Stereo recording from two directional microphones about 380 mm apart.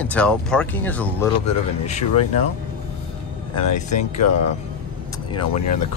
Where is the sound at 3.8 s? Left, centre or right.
Left.